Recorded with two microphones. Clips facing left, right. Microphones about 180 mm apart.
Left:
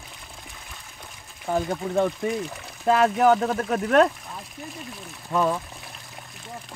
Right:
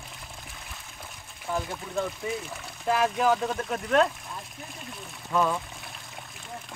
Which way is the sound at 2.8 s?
65° left (ahead or behind).